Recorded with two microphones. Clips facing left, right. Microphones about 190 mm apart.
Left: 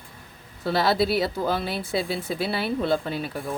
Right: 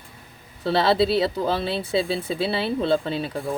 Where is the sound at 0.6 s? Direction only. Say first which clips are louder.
Right 3 dB; 25° right (ahead or behind).